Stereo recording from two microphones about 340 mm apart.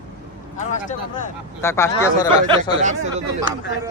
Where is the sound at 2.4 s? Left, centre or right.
Centre.